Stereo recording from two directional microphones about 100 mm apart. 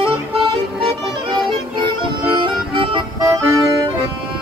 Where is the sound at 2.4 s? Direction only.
55° right (ahead or behind).